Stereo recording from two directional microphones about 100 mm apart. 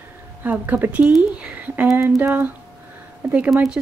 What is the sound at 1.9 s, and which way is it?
Speech, 25° right (ahead or behind).